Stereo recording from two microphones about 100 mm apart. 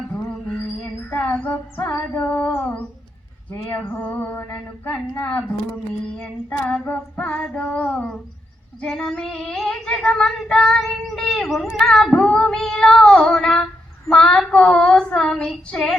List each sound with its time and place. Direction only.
1.1 s female singing: 15° left (ahead or behind)
3.5 s male singing: 20° left (ahead or behind)
4.5 s female singing: 20° left (ahead or behind)
11.4 s child singing: centre (ahead or behind)
12.1 s female singing: 5° left (ahead or behind)